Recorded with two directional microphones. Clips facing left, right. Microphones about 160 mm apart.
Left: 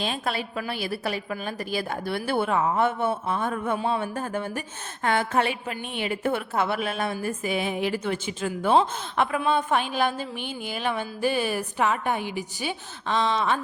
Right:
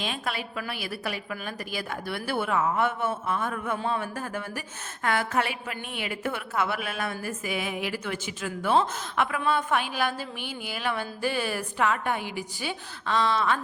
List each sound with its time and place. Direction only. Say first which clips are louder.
0.0 s a woman's voice: left 4 dB; 35° left (ahead or behind)